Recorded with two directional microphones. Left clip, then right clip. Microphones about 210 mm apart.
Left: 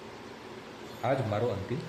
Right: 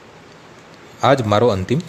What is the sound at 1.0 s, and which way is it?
Speech, 55° right (ahead or behind).